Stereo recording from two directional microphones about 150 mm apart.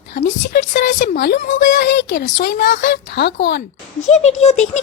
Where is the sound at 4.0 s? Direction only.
50° left (ahead or behind).